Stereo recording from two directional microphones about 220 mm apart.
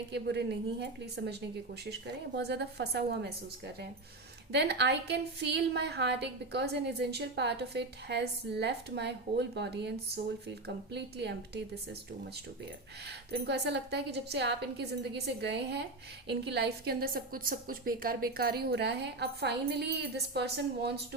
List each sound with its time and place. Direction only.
0.1 s a woman's voice: 50° right (ahead or behind)
4.5 s a woman's voice: 50° right (ahead or behind)
13.1 s a woman's voice: 50° right (ahead or behind)